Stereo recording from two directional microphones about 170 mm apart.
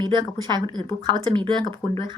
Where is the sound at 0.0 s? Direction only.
25° right (ahead or behind).